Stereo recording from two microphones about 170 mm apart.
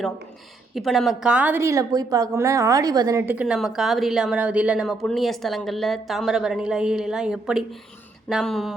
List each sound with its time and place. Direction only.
0.7 s a woman's voice: centre (ahead or behind)
3.4 s a woman's voice: centre (ahead or behind)